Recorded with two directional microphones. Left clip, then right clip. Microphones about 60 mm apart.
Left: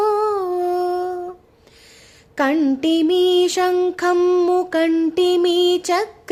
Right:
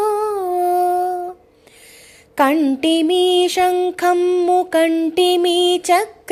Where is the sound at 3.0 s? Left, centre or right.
Centre.